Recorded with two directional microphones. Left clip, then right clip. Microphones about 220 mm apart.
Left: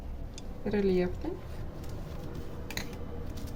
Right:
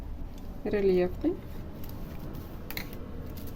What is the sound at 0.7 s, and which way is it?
Speech, 45° right (ahead or behind).